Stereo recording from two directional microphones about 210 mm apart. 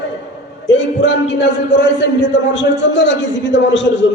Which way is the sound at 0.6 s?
60° left (ahead or behind).